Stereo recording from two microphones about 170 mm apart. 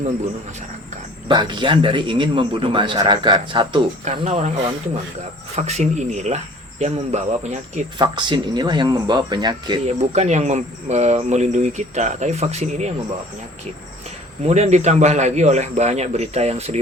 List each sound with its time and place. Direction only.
1.3 s a man's voice: 25° right (ahead or behind)
4.0 s speech: 40° right (ahead or behind)
5.5 s speech: 40° right (ahead or behind)
7.9 s a man's voice: 25° right (ahead or behind)
9.8 s speech: 40° right (ahead or behind)
14.4 s speech: 40° right (ahead or behind)